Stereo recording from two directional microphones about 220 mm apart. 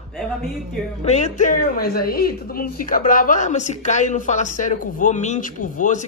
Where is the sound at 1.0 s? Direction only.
30° left (ahead or behind).